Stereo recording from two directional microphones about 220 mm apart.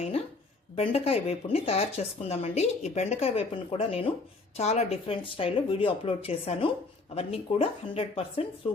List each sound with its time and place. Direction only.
0.8 s speech: 25° left (ahead or behind)